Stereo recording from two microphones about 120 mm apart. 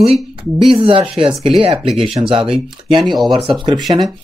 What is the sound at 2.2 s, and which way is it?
Speech, 45° right (ahead or behind).